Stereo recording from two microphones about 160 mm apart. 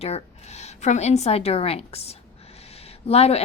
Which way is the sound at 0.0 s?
40° left (ahead or behind).